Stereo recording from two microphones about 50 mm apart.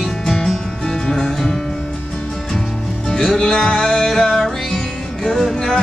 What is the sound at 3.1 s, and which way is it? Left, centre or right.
Music, centre.